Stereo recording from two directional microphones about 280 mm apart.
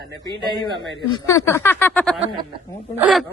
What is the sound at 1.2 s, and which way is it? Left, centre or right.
Female singing, centre.